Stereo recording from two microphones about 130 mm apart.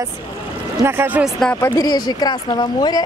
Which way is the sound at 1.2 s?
Centre (ahead or behind).